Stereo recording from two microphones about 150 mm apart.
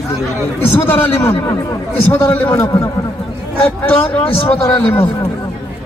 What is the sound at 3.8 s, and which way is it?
A man's voice, 15° left (ahead or behind).